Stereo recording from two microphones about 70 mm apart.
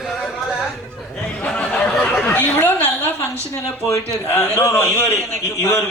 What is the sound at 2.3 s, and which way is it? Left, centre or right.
Speech, left.